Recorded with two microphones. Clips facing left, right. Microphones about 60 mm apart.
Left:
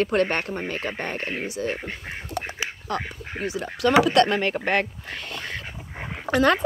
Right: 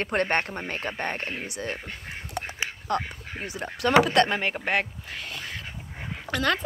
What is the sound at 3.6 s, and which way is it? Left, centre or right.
Speech, right.